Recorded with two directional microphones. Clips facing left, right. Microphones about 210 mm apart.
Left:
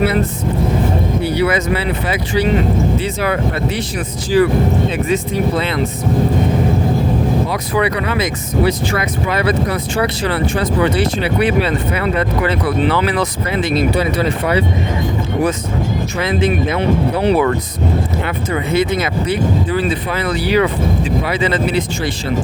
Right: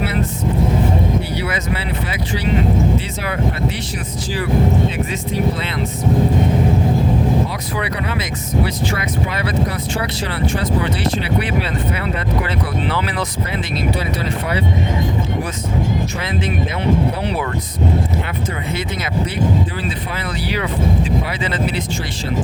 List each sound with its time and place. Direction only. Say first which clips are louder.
1.4 s speech: left 7 dB; 60° left (ahead or behind)
4.3 s speech: left 12 dB; 55° left (ahead or behind)
7.5 s speech: left 7 dB; 65° left (ahead or behind); by 8.7 s 85° left
8.9 s speech: left 3 dB; 60° left (ahead or behind)
16.2 s speech: left 6 dB; 75° left (ahead or behind)
17.2 s speech: left 9 dB; 90° left
18.8 s speech: left 6 dB; 70° left (ahead or behind)
21.2 s speech: left 6 dB; 75° left (ahead or behind)